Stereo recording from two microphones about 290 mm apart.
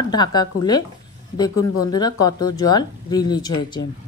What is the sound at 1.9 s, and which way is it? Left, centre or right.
Speech, centre.